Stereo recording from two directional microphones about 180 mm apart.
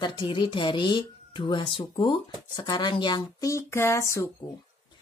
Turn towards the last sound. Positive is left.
turn(degrees=15)  # may be behind; listen again after turning